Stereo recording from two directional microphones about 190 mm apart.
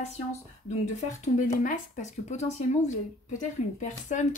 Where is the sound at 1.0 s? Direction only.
40° left (ahead or behind).